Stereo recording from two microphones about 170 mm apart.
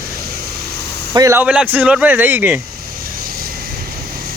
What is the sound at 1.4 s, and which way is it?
Speech, 5° right (ahead or behind).